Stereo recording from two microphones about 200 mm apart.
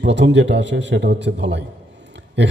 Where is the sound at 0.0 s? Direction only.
60° right (ahead or behind).